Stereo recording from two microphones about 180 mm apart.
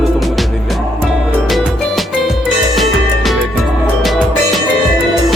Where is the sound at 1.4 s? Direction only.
Centre (ahead or behind).